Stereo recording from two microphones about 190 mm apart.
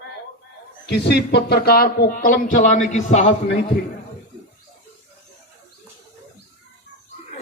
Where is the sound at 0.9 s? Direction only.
60° left (ahead or behind); by 3.3 s 35° left (ahead or behind).